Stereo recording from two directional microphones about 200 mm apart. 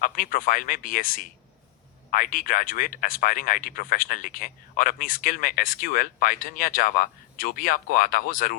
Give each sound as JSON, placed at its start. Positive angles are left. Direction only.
{"t": 0.0, "sound": "speech", "side_deg": 45}